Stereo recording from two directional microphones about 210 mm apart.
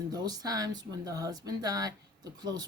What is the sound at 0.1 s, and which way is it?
Speech, 20° right (ahead or behind).